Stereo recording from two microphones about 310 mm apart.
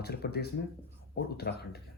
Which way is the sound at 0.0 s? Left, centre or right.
Left.